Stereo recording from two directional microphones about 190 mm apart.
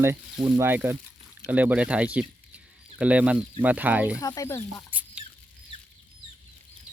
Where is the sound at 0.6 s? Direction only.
10° right (ahead or behind).